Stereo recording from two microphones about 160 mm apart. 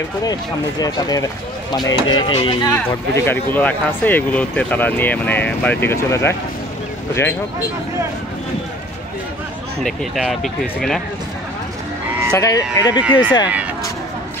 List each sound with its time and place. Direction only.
0.2 s speech: 25° left (ahead or behind)
2.7 s speech: 15° left (ahead or behind)
9.8 s speech: centre (ahead or behind)
12.4 s speech: 20° left (ahead or behind)